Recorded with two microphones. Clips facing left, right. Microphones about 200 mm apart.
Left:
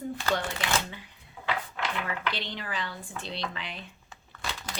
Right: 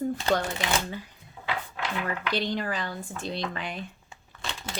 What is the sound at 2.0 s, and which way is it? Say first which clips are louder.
Speech: right 5 dB; 40° right (ahead or behind).